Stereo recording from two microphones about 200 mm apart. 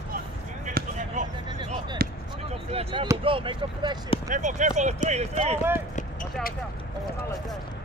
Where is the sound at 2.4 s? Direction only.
25° right (ahead or behind).